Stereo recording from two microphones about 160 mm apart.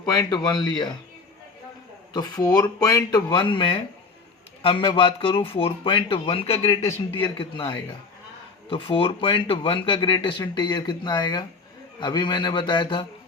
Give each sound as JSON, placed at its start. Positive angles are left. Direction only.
{"t": 0.0, "sound": "speech", "side_deg": 25}
{"t": 2.1, "sound": "speech", "side_deg": 25}